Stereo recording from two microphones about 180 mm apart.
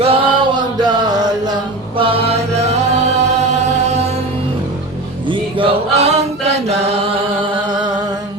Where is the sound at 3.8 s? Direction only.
35° right (ahead or behind).